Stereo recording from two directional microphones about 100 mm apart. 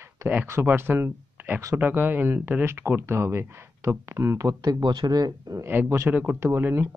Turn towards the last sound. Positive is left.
turn(degrees=-25)  # may be behind; listen again after turning